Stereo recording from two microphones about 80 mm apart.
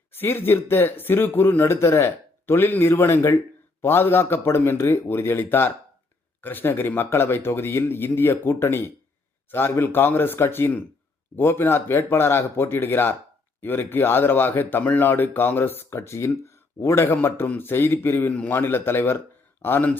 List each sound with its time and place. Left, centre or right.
0.1 s speech: left